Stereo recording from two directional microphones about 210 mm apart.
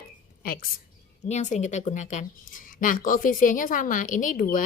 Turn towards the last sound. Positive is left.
turn(degrees=40)  # may be behind; listen again after turning